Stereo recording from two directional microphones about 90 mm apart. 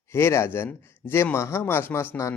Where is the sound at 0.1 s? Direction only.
30° left (ahead or behind).